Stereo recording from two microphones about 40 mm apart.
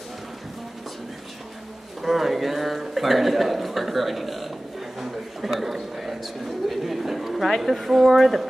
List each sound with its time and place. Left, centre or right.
2.0 s a man's voice: centre